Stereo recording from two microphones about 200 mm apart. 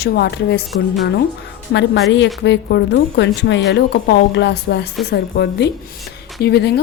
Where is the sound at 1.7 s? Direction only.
60° left (ahead or behind).